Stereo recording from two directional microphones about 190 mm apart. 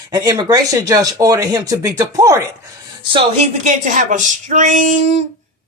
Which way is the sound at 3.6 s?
40° right (ahead or behind).